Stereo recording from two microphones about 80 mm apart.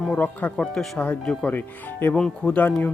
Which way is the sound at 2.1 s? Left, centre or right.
Centre.